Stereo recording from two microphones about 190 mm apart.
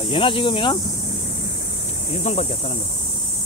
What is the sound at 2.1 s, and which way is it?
Speech, 40° left (ahead or behind).